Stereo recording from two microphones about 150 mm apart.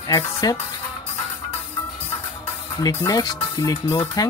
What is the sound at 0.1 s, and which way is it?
Speech, 25° left (ahead or behind).